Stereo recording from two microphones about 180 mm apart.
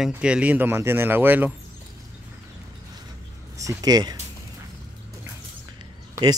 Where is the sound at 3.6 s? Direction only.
20° right (ahead or behind).